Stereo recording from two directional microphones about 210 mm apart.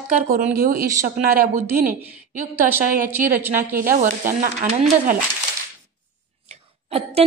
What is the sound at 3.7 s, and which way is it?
Speech, 40° right (ahead or behind).